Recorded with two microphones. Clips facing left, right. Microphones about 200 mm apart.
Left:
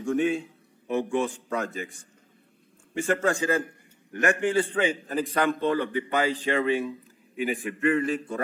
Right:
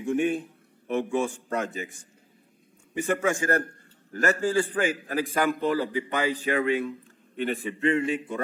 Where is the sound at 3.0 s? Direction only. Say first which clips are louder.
Left 1 dB; 15° right (ahead or behind).